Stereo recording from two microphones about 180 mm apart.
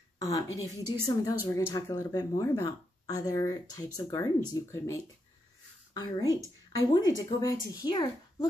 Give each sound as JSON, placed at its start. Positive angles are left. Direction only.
{"t": 0.3, "sound": "speech", "side_deg": 20}
{"t": 5.9, "sound": "speech", "side_deg": 20}